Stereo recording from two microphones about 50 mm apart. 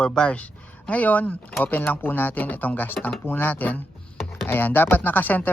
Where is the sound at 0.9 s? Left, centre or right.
Left.